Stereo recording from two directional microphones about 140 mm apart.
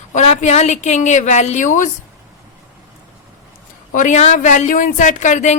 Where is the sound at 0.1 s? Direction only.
55° left (ahead or behind).